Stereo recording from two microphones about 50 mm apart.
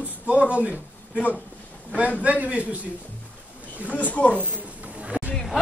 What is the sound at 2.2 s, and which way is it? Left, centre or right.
Speech, right.